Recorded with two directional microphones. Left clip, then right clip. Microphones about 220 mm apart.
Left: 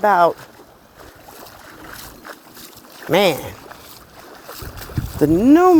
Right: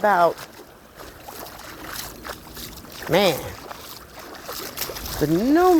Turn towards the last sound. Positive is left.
turn(degrees=65)  # may be behind; listen again after turning